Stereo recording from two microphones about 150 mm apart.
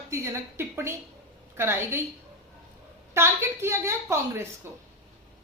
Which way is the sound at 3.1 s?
15° right (ahead or behind).